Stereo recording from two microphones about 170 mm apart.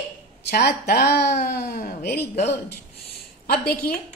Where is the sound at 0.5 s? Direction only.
75° left (ahead or behind); by 2.0 s 55° left (ahead or behind).